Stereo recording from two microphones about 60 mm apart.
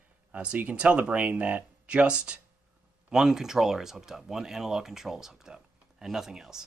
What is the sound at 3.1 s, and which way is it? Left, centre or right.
Speech, centre.